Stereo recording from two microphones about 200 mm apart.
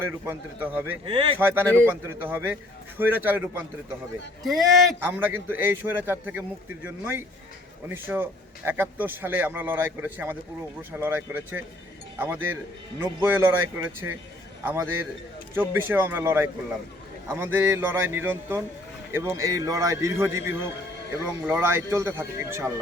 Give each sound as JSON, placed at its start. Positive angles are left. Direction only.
{"t": 0.0, "sound": "a man's voice", "side_deg": -10}
{"t": 1.0, "sound": "speech", "side_deg": -25}
{"t": 1.4, "sound": "a man's voice", "side_deg": -10}
{"t": 4.4, "sound": "speech", "side_deg": 0}
{"t": 4.9, "sound": "a man's voice", "side_deg": -10}
{"t": 14.6, "sound": "a man's voice", "side_deg": -10}